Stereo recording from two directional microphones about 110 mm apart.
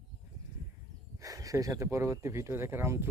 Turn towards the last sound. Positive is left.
turn(degrees=-25)  # may be behind; listen again after turning